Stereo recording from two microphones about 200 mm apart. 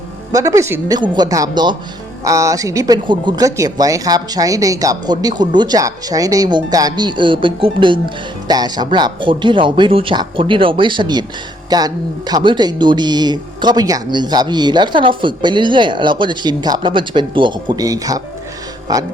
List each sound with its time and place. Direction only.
0.3 s speech: 15° right (ahead or behind)